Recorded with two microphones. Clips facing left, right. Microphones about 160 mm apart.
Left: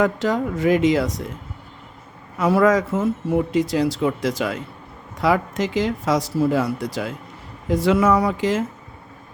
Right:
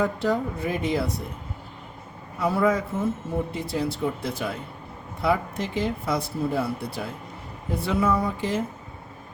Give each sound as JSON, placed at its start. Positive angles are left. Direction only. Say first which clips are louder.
{"t": 0.0, "sound": "a man's voice", "louder": "left 4 dB", "side_deg": 90}
{"t": 2.4, "sound": "a man's voice", "louder": "left 6 dB", "side_deg": 90}